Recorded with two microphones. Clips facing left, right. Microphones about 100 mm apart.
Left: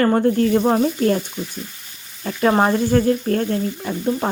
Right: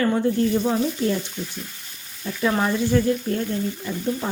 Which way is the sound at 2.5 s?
45° left (ahead or behind).